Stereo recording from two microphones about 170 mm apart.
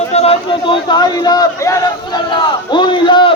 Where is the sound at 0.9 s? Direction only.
25° left (ahead or behind).